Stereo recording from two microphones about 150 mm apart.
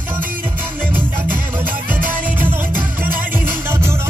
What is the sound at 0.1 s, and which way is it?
Music, 65° right (ahead or behind).